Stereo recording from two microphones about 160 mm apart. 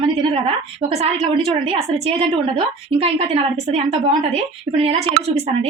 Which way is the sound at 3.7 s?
40° right (ahead or behind).